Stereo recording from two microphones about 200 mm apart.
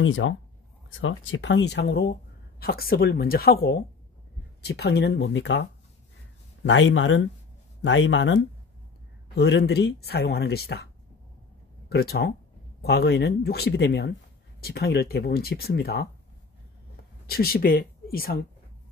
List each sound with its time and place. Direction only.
0.0 s speech: 80° left; by 10.9 s 55° left (ahead or behind)
11.9 s speech: 55° left (ahead or behind)
17.3 s speech: 50° left (ahead or behind)